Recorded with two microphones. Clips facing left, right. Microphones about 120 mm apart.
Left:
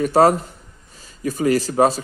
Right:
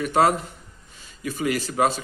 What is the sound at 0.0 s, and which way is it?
Speech, 40° left (ahead or behind).